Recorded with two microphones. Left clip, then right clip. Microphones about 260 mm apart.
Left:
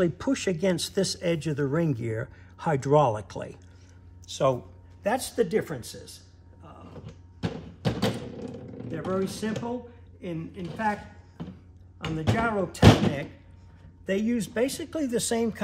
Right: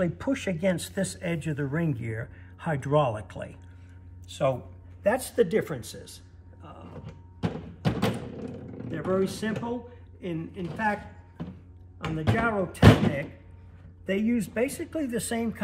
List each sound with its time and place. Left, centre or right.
0.0 s speech: centre
5.0 s a sound: centre
10.2 s speech: centre